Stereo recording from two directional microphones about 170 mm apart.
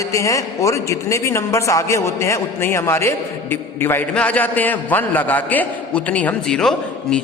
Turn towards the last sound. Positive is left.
turn(degrees=5)  # may be behind; listen again after turning